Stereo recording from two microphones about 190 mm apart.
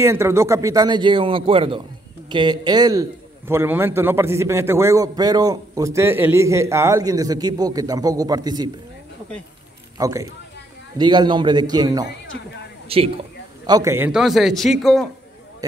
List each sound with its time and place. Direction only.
0.0 s a man's voice: 15° right (ahead or behind)
9.9 s a man's voice: 15° right (ahead or behind)
13.7 s a man's voice: 15° right (ahead or behind); by 15.0 s centre (ahead or behind)